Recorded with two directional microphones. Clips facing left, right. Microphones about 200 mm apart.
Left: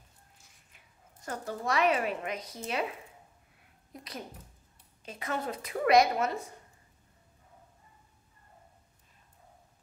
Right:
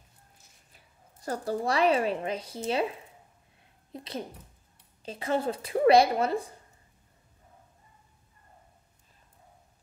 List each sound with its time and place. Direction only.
0.7 s a woman's voice: 35° right (ahead or behind)
3.9 s a woman's voice: 25° right (ahead or behind)